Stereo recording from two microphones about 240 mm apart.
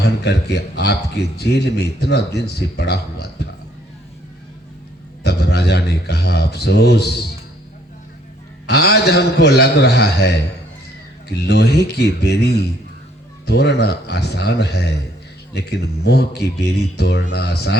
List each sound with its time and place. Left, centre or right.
0.0 s speech: left
5.2 s a man's voice: left
8.6 s speech: left
11.4 s speech: left